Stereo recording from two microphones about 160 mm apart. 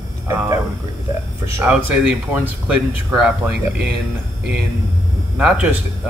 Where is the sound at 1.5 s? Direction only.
5° right (ahead or behind).